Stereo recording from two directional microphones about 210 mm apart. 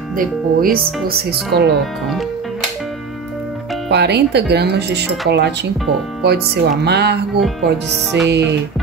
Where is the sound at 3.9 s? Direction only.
50° right (ahead or behind).